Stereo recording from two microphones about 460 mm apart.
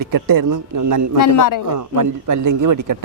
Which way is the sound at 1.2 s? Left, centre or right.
Left.